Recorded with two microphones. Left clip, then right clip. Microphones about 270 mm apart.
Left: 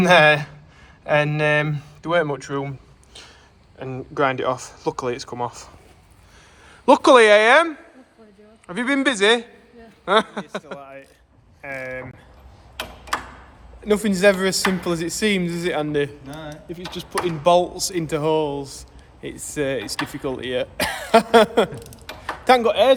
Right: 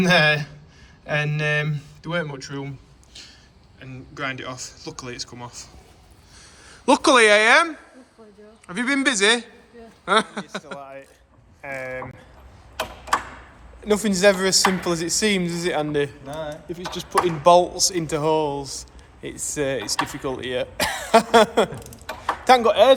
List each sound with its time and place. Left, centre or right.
0.0 s speech: centre
3.8 s speech: centre
6.8 s a woman's voice: centre
10.8 s speech: centre
13.8 s speech: centre
16.2 s speech: centre